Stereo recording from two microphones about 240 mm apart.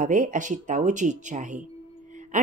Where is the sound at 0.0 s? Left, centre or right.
Right.